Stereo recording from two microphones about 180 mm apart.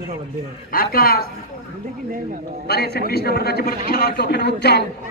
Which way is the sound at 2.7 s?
60° left (ahead or behind).